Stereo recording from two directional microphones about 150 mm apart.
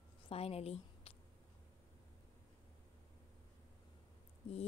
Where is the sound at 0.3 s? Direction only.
40° left (ahead or behind).